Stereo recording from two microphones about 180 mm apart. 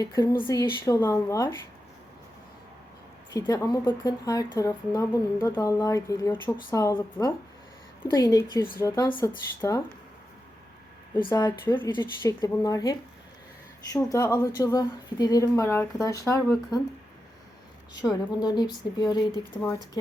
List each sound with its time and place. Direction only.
0.0 s speech: 20° left (ahead or behind)
3.3 s a woman's voice: 20° left (ahead or behind)
11.3 s a woman's voice: 15° left (ahead or behind)
18.0 s speech: 20° left (ahead or behind)
19.5 s a woman's voice: 10° left (ahead or behind)